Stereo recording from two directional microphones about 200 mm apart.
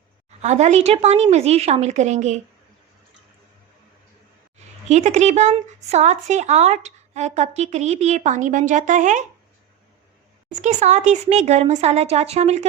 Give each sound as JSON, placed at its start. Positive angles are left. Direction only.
{"t": 0.4, "sound": "speech", "side_deg": -35}
{"t": 4.9, "sound": "speech", "side_deg": -35}
{"t": 10.5, "sound": "speech", "side_deg": -35}